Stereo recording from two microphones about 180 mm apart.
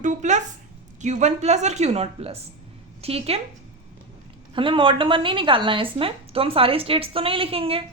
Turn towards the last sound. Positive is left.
turn(degrees=-30)  # may be behind; listen again after turning